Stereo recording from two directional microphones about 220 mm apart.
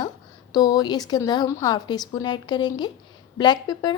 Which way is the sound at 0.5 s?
15° left (ahead or behind).